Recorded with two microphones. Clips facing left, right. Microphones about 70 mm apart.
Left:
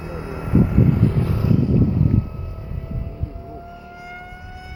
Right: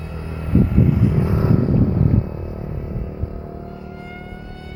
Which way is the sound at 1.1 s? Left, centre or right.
Right.